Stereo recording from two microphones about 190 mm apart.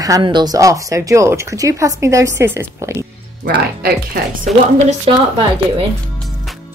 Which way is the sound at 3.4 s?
50° right (ahead or behind).